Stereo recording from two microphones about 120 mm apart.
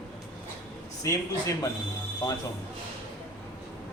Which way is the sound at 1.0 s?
25° left (ahead or behind).